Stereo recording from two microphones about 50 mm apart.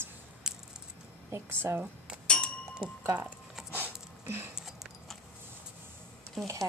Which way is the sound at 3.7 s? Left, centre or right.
Right.